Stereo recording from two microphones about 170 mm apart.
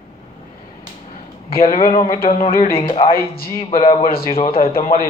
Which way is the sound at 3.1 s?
60° left (ahead or behind).